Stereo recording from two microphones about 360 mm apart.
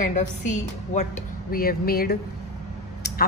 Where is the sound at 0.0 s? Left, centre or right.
Centre.